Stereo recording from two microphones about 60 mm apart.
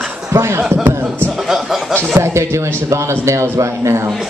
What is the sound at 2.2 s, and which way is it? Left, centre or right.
A man's voice, right.